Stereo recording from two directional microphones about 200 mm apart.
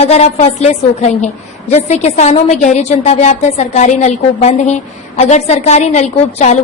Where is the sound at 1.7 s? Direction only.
35° left (ahead or behind).